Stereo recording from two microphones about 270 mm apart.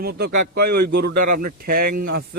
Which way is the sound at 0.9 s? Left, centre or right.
Right.